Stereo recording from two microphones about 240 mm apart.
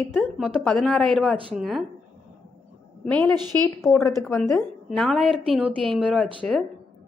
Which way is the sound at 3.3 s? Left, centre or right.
Centre.